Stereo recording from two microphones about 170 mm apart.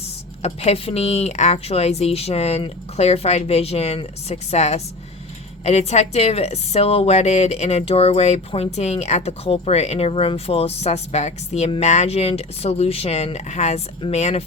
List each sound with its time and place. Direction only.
0.4 s a woman's voice: 35° left (ahead or behind)